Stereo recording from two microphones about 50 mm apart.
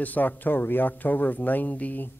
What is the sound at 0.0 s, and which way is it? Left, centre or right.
Speech, left.